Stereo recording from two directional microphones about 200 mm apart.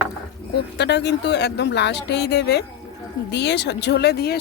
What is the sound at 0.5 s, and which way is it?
A woman's voice, 60° left (ahead or behind).